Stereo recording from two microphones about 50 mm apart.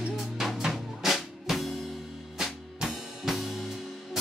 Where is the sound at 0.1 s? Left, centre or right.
Centre.